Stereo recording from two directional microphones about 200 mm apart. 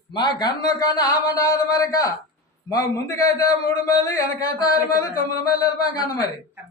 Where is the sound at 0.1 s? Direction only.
20° left (ahead or behind).